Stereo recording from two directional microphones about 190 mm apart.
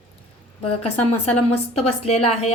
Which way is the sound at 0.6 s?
30° left (ahead or behind).